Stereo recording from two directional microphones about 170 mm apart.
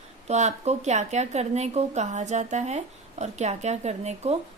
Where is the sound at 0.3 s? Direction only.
40° right (ahead or behind).